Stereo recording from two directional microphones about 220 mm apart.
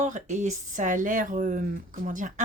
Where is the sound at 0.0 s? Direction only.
35° right (ahead or behind).